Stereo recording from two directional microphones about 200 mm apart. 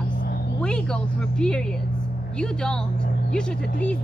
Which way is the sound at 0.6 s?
5° left (ahead or behind).